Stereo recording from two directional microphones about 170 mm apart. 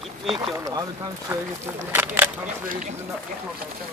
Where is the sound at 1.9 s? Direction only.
10° right (ahead or behind).